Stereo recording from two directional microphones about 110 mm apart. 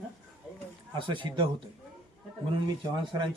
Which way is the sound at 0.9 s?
50° right (ahead or behind).